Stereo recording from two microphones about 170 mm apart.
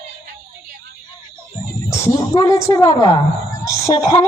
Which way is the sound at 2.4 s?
20° left (ahead or behind).